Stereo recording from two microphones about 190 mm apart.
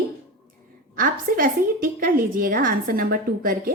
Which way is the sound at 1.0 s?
45° right (ahead or behind).